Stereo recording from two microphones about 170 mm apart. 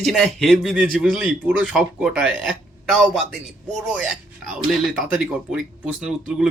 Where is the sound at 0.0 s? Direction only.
Centre (ahead or behind).